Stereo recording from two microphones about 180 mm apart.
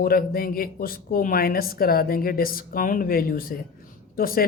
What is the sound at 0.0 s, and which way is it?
Speech, 55° left (ahead or behind).